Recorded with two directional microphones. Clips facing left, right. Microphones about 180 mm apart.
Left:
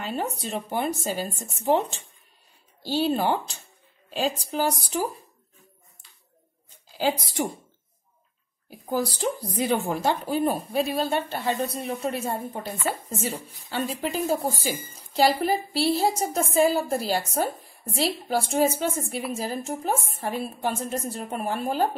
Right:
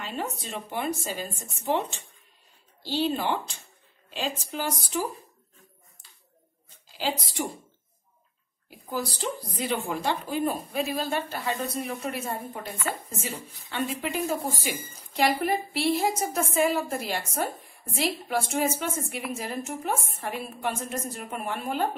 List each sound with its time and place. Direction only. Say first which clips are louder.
0.1 s a woman's voice: left 4 dB; 35° left (ahead or behind)
8.6 s a woman's voice: left 5 dB; 45° left (ahead or behind)